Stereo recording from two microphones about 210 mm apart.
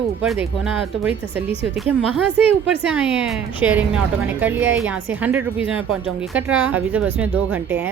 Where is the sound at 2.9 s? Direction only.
5° right (ahead or behind).